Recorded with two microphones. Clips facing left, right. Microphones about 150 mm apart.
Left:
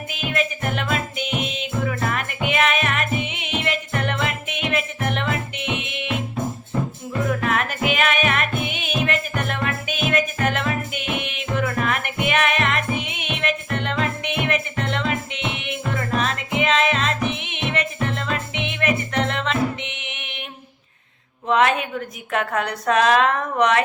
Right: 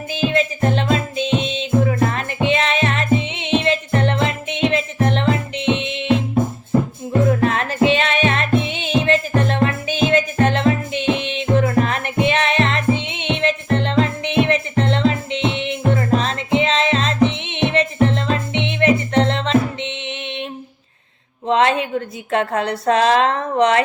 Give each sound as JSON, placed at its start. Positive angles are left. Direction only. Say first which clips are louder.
{"t": 0.1, "sound": "music", "louder": "right 7 dB", "side_deg": -30}
{"t": 7.2, "sound": "music", "louder": "right 5 dB", "side_deg": -30}
{"t": 21.4, "sound": "a sound", "louder": "right 2 dB", "side_deg": -30}